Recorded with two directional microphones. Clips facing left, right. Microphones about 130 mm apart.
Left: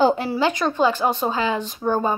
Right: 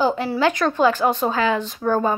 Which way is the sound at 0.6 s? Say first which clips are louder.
Right 2 dB; centre (ahead or behind).